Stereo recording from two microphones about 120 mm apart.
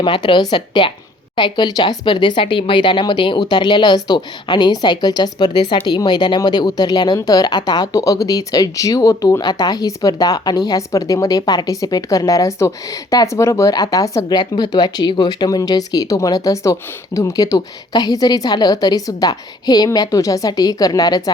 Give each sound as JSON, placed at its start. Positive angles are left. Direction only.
{"t": 0.0, "sound": "speech", "side_deg": 40}